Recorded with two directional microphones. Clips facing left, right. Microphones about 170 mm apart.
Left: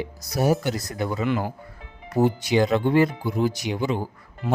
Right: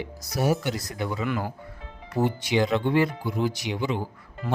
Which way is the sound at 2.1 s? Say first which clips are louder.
Left 4 dB; 40° left (ahead or behind).